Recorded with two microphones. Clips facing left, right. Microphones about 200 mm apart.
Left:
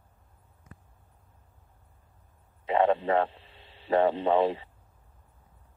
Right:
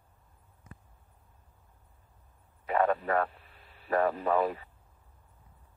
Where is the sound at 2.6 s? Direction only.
25° left (ahead or behind).